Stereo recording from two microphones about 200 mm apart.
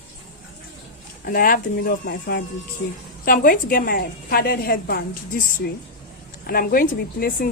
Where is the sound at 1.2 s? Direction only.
45° left (ahead or behind).